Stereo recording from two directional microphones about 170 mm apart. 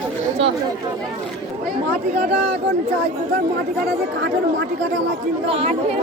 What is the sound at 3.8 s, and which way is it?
Speech, 90° right.